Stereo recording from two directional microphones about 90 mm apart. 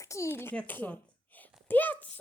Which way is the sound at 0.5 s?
20° left (ahead or behind).